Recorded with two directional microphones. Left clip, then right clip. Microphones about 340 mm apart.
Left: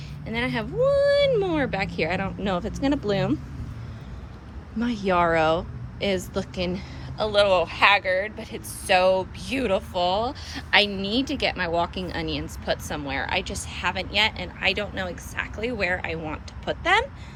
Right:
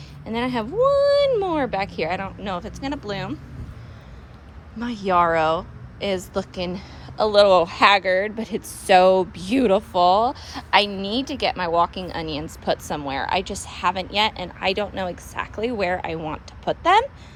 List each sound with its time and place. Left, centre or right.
0.3 s speech: centre
4.8 s a woman's voice: centre